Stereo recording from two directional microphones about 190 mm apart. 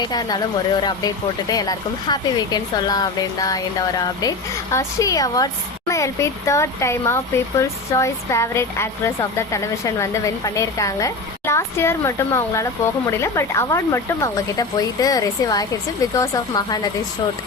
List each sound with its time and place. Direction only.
0.1 s speech: 20° left (ahead or behind)